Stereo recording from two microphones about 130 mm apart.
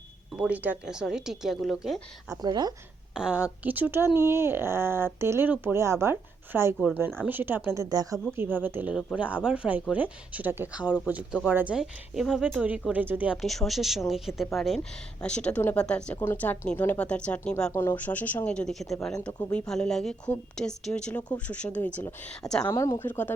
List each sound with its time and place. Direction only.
0.3 s a woman's voice: 10° right (ahead or behind)
2.4 s speech: 30° right (ahead or behind)
3.2 s speech: 5° right (ahead or behind)
13.3 s a woman's voice: centre (ahead or behind)
17.7 s speech: 20° left (ahead or behind)
22.6 s speech: 25° left (ahead or behind)